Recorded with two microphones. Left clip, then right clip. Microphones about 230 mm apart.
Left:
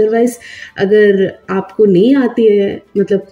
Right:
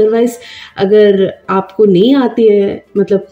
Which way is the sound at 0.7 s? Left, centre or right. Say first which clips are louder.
Right 2 dB; centre.